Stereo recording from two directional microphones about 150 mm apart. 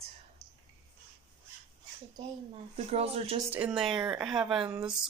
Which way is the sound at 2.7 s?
45° right (ahead or behind).